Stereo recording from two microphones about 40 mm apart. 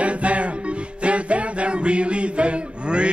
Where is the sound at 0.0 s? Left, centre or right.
Right.